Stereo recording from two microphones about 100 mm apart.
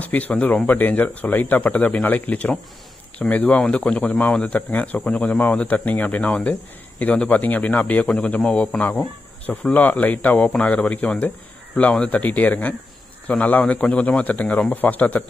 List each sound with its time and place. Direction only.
0.0 s speech: 15° left (ahead or behind)